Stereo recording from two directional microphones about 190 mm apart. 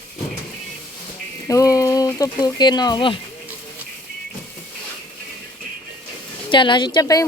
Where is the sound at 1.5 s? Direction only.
15° left (ahead or behind).